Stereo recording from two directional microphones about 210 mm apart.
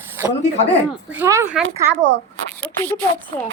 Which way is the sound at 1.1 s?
10° right (ahead or behind).